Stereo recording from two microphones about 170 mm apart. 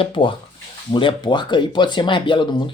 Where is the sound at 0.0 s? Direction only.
30° left (ahead or behind).